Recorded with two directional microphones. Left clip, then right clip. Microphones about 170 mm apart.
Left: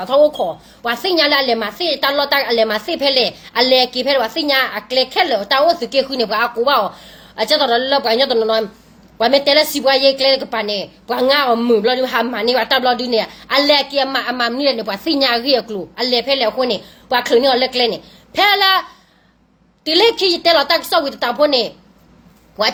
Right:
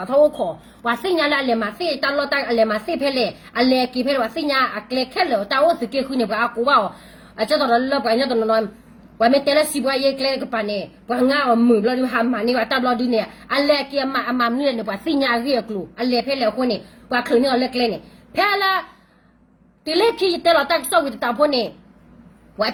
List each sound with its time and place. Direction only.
0.0 s a woman's voice: 15° right (ahead or behind)
11.5 s a man's voice: 40° left (ahead or behind)
11.8 s a woman's voice: 15° right (ahead or behind)
19.8 s a woman's voice: 15° right (ahead or behind)